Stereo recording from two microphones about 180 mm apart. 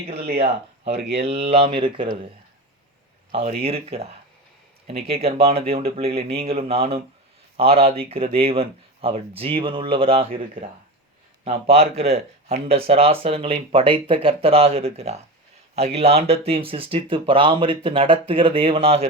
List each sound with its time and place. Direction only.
0.9 s speech: 70° right (ahead or behind)
1.2 s speech: 35° right (ahead or behind)
3.3 s speech: 35° right (ahead or behind)
11.4 s speech: 35° right (ahead or behind)